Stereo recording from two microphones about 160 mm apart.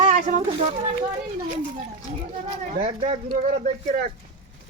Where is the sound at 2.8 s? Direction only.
40° right (ahead or behind).